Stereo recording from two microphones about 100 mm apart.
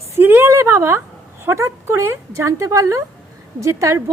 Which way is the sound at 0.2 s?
20° right (ahead or behind).